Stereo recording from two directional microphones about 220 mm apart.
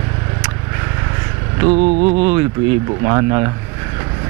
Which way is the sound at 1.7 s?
30° right (ahead or behind).